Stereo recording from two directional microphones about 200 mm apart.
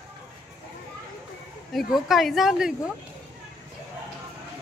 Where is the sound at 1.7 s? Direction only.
Centre (ahead or behind).